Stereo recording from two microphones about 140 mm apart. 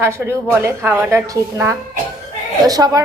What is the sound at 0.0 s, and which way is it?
A woman's voice, 20° right (ahead or behind).